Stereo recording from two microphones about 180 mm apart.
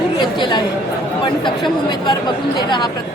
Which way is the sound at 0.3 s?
25° left (ahead or behind).